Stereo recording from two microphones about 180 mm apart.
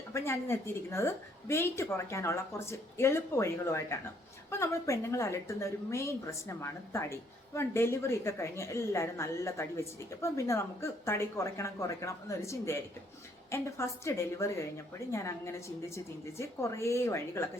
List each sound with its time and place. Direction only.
0.1 s a woman's voice: 15° left (ahead or behind)